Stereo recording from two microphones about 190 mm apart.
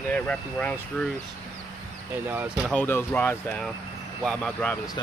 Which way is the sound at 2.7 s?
10° left (ahead or behind).